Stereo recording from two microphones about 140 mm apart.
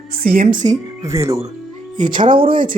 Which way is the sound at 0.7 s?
20° right (ahead or behind).